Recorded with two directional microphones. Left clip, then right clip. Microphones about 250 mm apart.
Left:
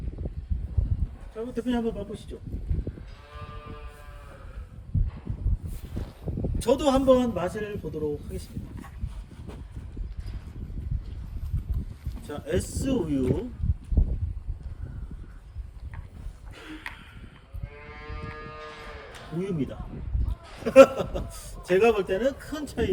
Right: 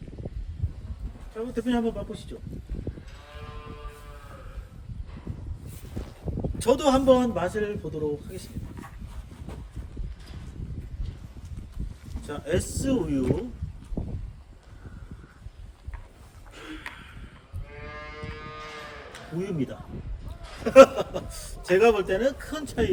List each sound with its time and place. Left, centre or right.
1.4 s a man's voice: centre
6.3 s a sound: left
6.6 s a man's voice: centre
12.3 s a man's voice: centre
19.4 s a man's voice: centre